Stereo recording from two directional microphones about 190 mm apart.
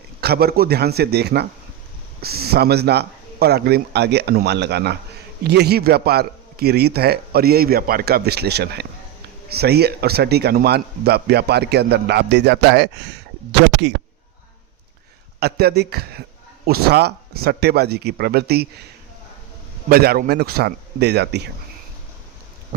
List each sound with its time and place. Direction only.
0.2 s a man's voice: 55° right (ahead or behind)
15.4 s a man's voice: 55° right (ahead or behind)
19.9 s a man's voice: 50° right (ahead or behind)